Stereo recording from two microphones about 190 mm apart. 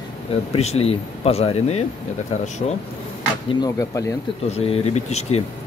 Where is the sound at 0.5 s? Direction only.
35° left (ahead or behind).